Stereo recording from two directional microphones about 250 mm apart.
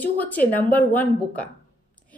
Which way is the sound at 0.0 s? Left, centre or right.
Centre.